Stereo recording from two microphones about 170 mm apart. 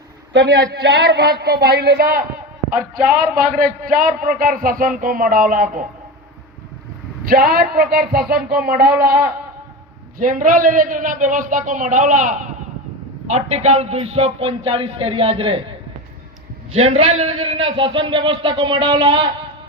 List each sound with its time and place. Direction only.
0.3 s a man's voice: 80° right; by 5.8 s 50° right (ahead or behind)
7.3 s a man's voice: 65° right (ahead or behind)
10.2 s a man's voice: 55° right (ahead or behind); by 15.7 s 35° right (ahead or behind)
16.7 s a man's voice: 40° right (ahead or behind)